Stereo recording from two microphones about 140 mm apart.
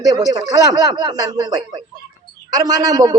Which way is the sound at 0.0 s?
25° right (ahead or behind).